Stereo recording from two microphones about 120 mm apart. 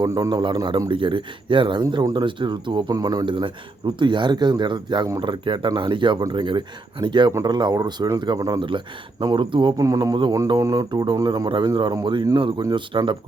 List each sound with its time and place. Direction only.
0.0 s speech: 30° right (ahead or behind)
9.8 s speech: 30° right (ahead or behind)